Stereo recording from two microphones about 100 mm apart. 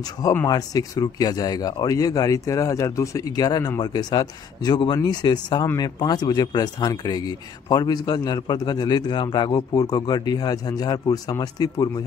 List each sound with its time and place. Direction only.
0.5 s speech: 40° left (ahead or behind)